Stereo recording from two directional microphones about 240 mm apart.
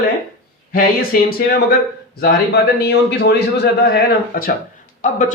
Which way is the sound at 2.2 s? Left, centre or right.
Left.